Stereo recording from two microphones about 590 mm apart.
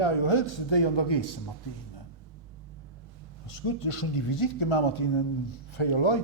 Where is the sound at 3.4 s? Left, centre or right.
Left.